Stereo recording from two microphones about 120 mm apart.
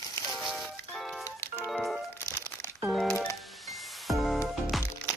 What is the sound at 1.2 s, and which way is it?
Music, 25° left (ahead or behind).